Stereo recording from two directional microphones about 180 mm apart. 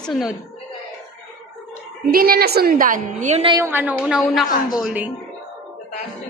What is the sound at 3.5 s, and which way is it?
A woman's voice, 10° right (ahead or behind).